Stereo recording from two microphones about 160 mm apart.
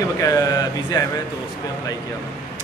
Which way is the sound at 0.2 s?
20° left (ahead or behind).